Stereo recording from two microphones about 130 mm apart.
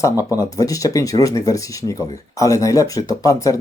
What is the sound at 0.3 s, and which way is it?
Speech, 25° left (ahead or behind).